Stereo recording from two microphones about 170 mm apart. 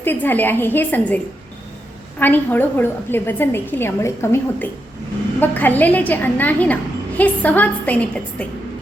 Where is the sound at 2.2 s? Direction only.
10° left (ahead or behind).